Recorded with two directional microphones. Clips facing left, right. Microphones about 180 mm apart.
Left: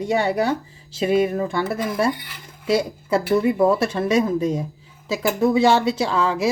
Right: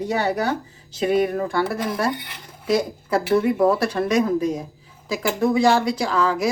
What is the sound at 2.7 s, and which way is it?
A woman's voice, 25° left (ahead or behind).